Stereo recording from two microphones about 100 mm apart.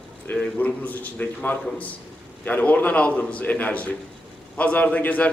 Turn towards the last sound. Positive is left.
turn(degrees=15)  # may be behind; listen again after turning